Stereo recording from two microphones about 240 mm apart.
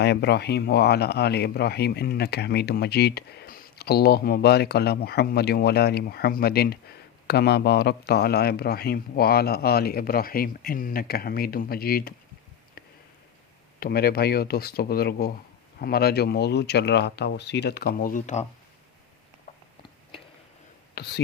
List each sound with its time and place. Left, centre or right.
0.0 s speech: left
13.7 s speech: left
20.9 s speech: left